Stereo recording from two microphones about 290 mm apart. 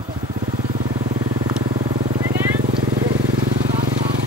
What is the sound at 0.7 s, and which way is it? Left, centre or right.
Vehicle, right.